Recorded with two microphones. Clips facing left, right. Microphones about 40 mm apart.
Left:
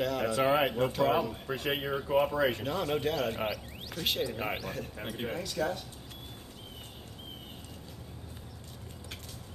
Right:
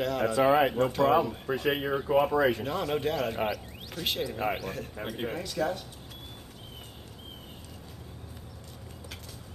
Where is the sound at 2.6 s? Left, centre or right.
Centre.